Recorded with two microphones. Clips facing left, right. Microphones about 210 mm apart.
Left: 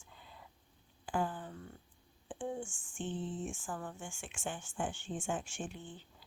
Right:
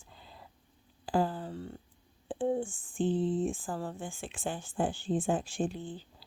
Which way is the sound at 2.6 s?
90° right.